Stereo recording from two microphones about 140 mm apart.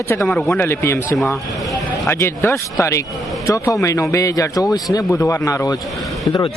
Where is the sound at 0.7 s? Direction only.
20° left (ahead or behind).